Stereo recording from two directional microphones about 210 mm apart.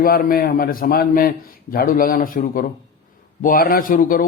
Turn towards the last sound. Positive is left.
turn(degrees=40)  # may be behind; listen again after turning